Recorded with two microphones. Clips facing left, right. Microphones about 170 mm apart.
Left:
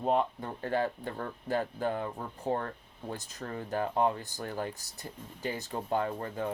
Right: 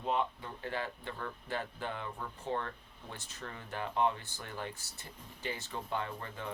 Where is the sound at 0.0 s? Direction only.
45° left (ahead or behind).